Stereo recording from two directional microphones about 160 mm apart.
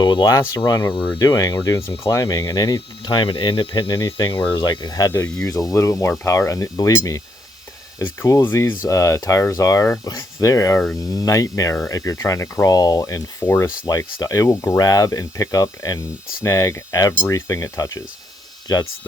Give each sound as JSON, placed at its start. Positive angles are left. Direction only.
{"t": 0.0, "sound": "speech", "side_deg": 25}